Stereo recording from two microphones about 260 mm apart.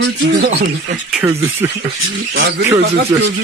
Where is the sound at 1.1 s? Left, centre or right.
Centre.